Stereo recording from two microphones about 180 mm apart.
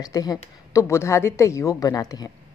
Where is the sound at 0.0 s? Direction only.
20° left (ahead or behind).